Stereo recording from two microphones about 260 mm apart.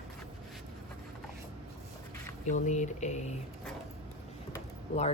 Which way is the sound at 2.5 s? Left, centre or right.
Left.